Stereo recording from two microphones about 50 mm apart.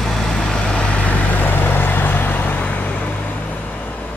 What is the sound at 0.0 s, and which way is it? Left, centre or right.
Vehicle, centre.